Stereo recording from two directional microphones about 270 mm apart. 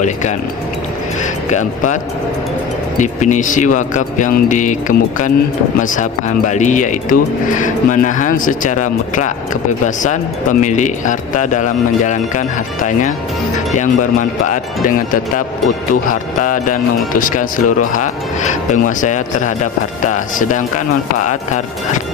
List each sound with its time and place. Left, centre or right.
0.0 s speech: left
1.5 s speech: left
3.0 s speech: left
17.6 s speech: left
18.7 s speech: left